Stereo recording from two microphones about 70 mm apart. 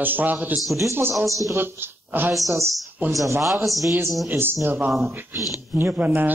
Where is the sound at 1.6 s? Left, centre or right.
Right.